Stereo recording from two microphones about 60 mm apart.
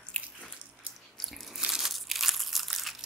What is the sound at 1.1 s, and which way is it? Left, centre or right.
Crunch, centre.